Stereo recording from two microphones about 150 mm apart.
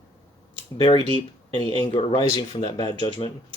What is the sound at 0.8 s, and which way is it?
Speech, 35° left (ahead or behind).